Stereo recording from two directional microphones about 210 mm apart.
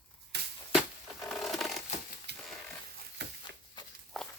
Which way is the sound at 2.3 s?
50° right (ahead or behind).